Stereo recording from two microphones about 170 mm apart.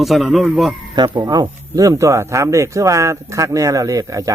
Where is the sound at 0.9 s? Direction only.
25° right (ahead or behind).